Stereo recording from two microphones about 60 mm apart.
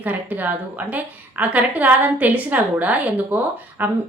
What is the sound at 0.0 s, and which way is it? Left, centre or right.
A woman's voice, right.